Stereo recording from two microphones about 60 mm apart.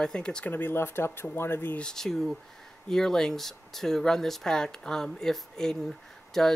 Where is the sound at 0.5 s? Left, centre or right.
Left.